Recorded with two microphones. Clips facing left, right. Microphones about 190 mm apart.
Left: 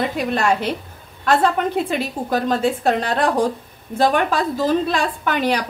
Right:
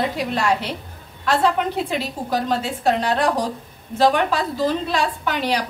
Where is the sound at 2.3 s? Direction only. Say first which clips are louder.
Left 4 dB; 50° left (ahead or behind).